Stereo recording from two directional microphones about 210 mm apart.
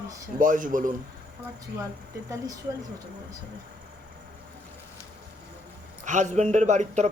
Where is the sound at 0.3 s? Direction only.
40° right (ahead or behind).